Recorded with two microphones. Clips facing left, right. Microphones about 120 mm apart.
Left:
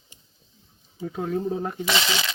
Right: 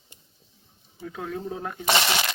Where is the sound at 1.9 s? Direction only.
55° right (ahead or behind).